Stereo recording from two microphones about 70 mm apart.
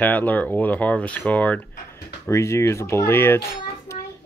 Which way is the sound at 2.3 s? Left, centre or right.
Left.